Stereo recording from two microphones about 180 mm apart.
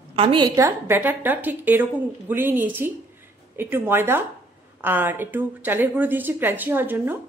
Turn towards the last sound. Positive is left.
turn(degrees=-10)  # may be behind; listen again after turning